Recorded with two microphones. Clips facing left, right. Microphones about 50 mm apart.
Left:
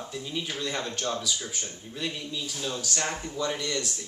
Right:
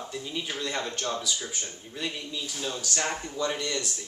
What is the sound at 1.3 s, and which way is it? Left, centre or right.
Speech, centre.